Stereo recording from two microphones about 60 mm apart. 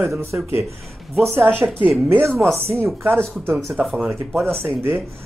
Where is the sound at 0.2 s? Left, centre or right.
Right.